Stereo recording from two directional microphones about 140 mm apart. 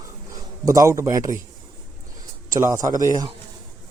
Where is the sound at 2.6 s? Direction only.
25° right (ahead or behind).